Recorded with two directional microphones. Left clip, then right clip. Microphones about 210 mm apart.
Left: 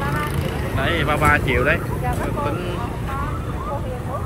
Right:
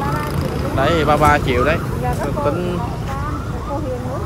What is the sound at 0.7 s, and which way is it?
Speech, 25° right (ahead or behind).